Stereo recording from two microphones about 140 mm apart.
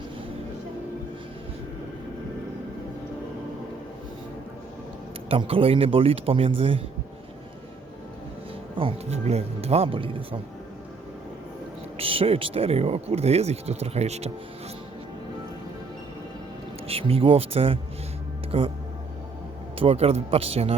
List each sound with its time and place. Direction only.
5.3 s speech: 40° right (ahead or behind)
8.8 s speech: 45° right (ahead or behind)
11.9 s speech: 40° right (ahead or behind)
16.8 s speech: 45° right (ahead or behind)
19.8 s speech: 45° right (ahead or behind)